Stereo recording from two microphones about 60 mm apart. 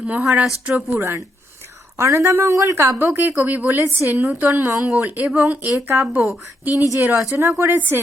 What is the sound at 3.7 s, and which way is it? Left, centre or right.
Speech, right.